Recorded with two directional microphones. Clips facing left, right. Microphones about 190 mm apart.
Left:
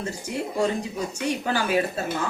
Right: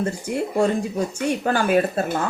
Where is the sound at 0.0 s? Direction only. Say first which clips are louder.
Right 5 dB; 55° right (ahead or behind).